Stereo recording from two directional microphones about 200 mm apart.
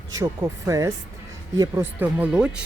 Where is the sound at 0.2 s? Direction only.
15° right (ahead or behind).